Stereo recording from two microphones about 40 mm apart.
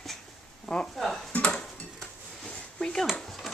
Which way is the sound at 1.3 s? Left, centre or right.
Left.